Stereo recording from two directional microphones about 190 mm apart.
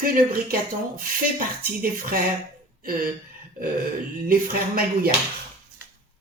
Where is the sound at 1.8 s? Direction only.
50° right (ahead or behind).